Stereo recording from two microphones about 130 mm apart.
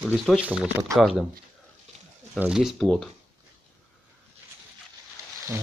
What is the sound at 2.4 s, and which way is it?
Speech, 5° right (ahead or behind).